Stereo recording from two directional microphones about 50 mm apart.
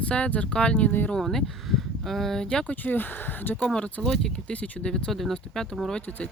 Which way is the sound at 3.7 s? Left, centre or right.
Centre.